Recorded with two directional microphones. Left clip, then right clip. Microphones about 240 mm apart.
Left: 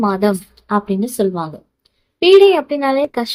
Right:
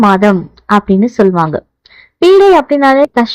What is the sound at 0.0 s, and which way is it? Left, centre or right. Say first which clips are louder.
A woman's voice: right 8 dB; right.